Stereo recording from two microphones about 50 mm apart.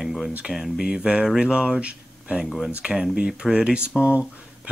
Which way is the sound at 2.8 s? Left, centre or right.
Centre.